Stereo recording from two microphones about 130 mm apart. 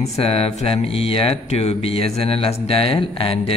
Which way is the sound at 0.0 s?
50° left (ahead or behind).